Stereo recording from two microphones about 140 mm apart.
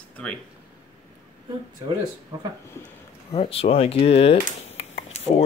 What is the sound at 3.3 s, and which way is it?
Speech, 45° left (ahead or behind).